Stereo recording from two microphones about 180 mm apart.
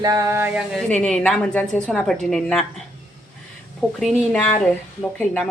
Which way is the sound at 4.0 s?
Centre (ahead or behind).